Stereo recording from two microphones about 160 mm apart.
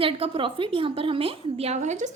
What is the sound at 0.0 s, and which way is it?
A woman's voice, 35° right (ahead or behind).